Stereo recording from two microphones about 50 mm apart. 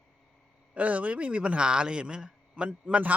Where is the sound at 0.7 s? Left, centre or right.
Right.